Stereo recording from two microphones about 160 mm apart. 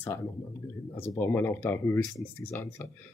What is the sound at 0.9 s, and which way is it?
Speech, 15° left (ahead or behind).